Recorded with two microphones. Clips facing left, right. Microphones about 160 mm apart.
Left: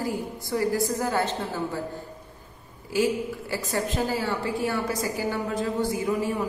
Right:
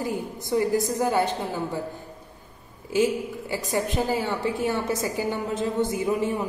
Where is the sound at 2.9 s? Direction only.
20° right (ahead or behind).